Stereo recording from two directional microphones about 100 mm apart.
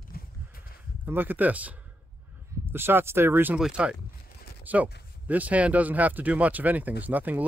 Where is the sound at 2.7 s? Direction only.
25° right (ahead or behind).